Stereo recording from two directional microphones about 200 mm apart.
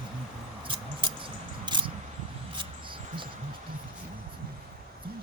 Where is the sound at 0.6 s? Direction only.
25° right (ahead or behind).